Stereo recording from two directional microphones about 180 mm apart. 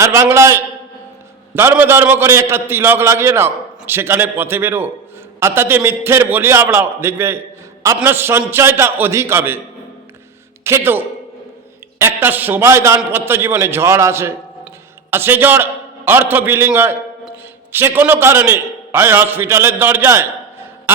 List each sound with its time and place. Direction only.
0.0 s a man's voice: 15° right (ahead or behind)
10.6 s a man's voice: 15° right (ahead or behind)